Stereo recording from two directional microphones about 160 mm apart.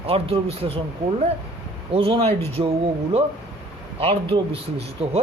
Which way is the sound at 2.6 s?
25° right (ahead or behind).